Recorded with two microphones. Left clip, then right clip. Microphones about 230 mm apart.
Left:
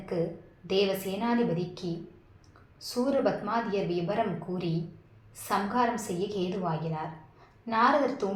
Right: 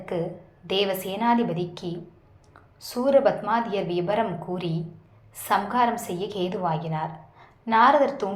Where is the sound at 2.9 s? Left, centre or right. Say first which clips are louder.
Right 7 dB; right.